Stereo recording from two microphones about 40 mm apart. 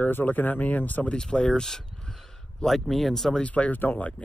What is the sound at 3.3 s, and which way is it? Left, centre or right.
Speech, left.